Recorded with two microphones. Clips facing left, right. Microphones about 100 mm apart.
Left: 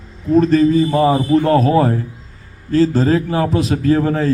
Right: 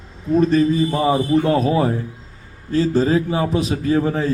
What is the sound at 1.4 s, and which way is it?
Speech, 45° left (ahead or behind).